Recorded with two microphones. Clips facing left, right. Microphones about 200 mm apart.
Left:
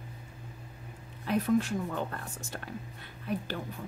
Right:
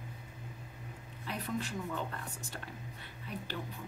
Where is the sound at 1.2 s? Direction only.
50° left (ahead or behind).